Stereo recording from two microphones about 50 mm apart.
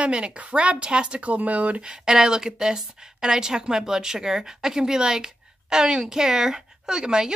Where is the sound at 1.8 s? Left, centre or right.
Centre.